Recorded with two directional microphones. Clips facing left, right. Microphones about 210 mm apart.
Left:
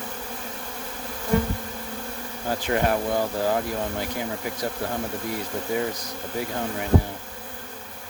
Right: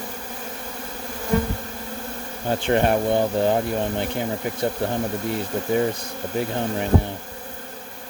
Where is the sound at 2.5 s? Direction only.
30° right (ahead or behind).